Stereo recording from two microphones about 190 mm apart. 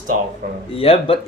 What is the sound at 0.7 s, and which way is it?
Speech, 30° left (ahead or behind).